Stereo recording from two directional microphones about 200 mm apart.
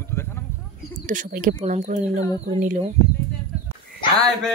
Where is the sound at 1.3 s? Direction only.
40° right (ahead or behind).